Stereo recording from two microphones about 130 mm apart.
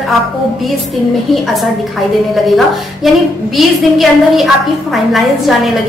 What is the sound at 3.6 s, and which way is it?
A woman's voice, centre (ahead or behind).